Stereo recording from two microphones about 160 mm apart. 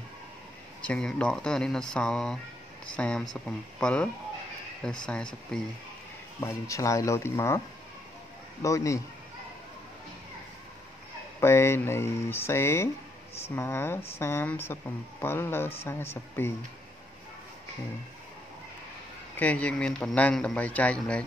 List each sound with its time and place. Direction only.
0.8 s speech: 5° left (ahead or behind)
6.4 s a man's voice: 20° left (ahead or behind)
8.6 s a man's voice: 20° left (ahead or behind)
11.4 s a man's voice: 15° left (ahead or behind)
19.3 s a man's voice: 10° left (ahead or behind)